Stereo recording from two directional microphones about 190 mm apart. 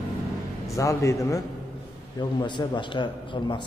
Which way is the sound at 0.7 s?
15° left (ahead or behind).